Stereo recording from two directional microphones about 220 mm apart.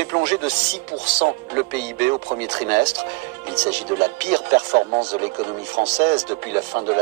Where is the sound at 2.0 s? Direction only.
50° right (ahead or behind).